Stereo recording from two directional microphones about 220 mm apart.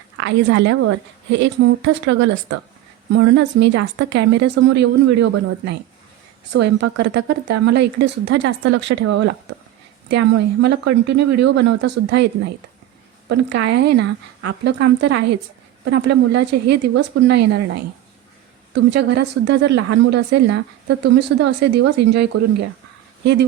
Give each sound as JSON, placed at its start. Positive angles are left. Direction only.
{"t": 0.2, "sound": "a woman's voice", "side_deg": -55}
{"t": 6.8, "sound": "a woman's voice", "side_deg": -50}
{"t": 18.7, "sound": "a woman's voice", "side_deg": -50}